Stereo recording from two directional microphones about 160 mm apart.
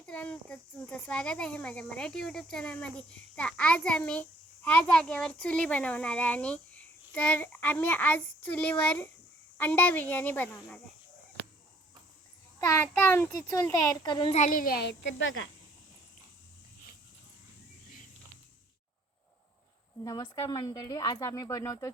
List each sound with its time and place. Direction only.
0.0 s speech: 10° left (ahead or behind)
12.5 s speech: 15° left (ahead or behind)
14.3 s a child's voice: 55° left (ahead or behind); by 14.9 s 80° left
20.1 s speech: 25° left (ahead or behind)